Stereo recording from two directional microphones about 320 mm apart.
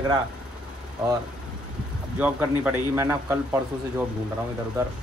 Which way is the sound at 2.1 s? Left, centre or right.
Centre.